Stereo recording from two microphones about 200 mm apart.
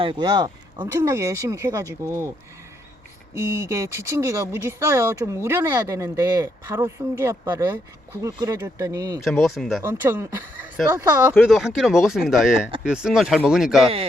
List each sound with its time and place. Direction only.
0.0 s speech: 25° right (ahead or behind)
3.3 s speech: 15° right (ahead or behind)
9.2 s speech: centre (ahead or behind)
9.8 s speech: 10° right (ahead or behind)
11.3 s speech: centre (ahead or behind)